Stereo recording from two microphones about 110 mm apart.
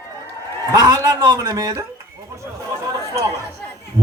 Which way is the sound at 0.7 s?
35° right (ahead or behind).